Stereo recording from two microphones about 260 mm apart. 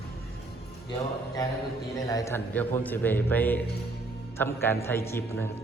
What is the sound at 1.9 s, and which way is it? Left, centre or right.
A man's voice, centre.